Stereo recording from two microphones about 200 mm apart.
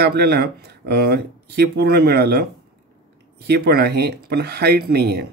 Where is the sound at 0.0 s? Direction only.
55° right (ahead or behind).